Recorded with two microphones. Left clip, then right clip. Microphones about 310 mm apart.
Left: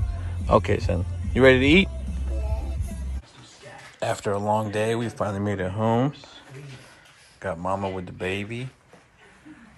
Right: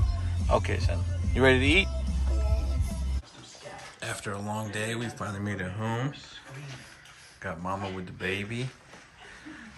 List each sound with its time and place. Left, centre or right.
0.5 s speech: centre
4.0 s speech: centre
7.4 s speech: centre